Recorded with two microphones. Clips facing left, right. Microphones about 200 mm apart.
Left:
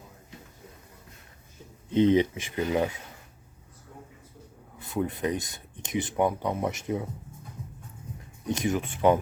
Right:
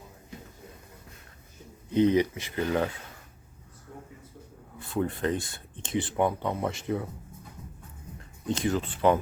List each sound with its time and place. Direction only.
1.9 s speech: 20° left (ahead or behind)
4.8 s speech: 20° left (ahead or behind)
8.2 s speech: 15° left (ahead or behind)